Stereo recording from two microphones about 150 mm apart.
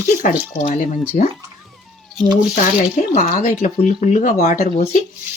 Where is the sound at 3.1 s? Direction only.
55° left (ahead or behind).